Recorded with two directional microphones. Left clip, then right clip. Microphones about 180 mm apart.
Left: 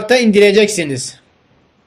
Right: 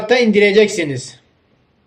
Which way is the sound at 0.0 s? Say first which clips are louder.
Left 2 dB; 35° left (ahead or behind).